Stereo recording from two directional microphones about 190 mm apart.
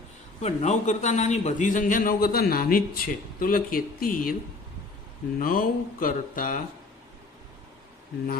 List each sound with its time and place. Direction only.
0.3 s a man's voice: 35° left (ahead or behind)
5.4 s a man's voice: 45° left (ahead or behind)